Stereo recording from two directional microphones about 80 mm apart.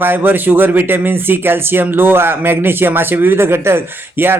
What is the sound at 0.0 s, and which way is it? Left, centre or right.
Speech, right.